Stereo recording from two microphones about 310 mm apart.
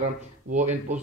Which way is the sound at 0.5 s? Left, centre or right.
Right.